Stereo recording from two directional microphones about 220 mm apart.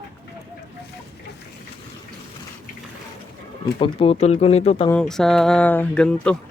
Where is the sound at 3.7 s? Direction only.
25° left (ahead or behind).